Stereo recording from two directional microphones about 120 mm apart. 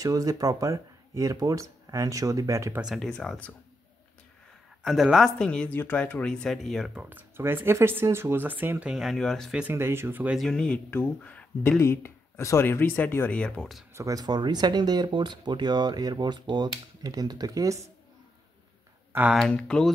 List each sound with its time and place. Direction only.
0.0 s speech: 30° right (ahead or behind)
2.8 s speech: 5° right (ahead or behind)
4.8 s speech: centre (ahead or behind)
7.0 s speech: 15° right (ahead or behind); by 9.6 s 5° left (ahead or behind)
9.6 s speech: 20° right (ahead or behind)
10.3 s speech: 5° left (ahead or behind)
13.9 s speech: 30° right (ahead or behind)
19.3 s speech: 5° left (ahead or behind)